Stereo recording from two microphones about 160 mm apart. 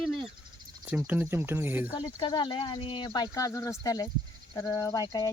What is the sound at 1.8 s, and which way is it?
Speech, 25° left (ahead or behind).